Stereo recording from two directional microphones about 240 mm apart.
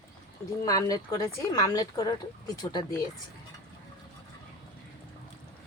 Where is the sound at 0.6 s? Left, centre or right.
Centre.